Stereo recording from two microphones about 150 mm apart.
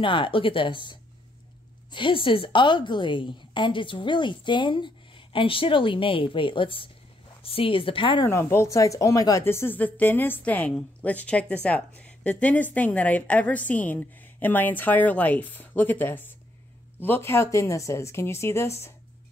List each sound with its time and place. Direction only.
0.0 s a woman's voice: 35° left (ahead or behind)
8.3 s a woman's voice: 15° left (ahead or behind)